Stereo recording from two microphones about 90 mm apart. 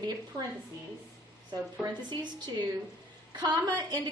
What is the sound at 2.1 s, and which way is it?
A woman's voice, 55° right (ahead or behind).